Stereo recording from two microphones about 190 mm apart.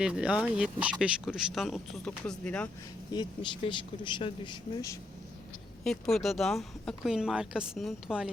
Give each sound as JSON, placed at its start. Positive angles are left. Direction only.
{"t": 0.0, "sound": "speech", "side_deg": -5}
{"t": 3.1, "sound": "speech", "side_deg": 25}
{"t": 5.8, "sound": "speech", "side_deg": 0}